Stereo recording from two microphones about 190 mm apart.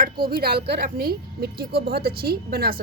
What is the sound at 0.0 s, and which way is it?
A woman's voice, 50° right (ahead or behind).